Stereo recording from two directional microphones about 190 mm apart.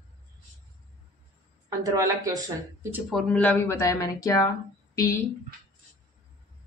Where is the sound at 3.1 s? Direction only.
5° left (ahead or behind).